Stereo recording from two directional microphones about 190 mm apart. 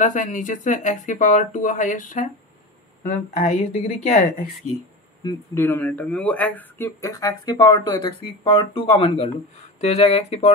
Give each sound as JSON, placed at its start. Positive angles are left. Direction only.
{"t": 0.0, "sound": "speech", "side_deg": 40}
{"t": 5.2, "sound": "speech", "side_deg": 15}